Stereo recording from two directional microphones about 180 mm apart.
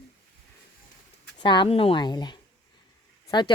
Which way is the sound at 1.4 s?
25° left (ahead or behind).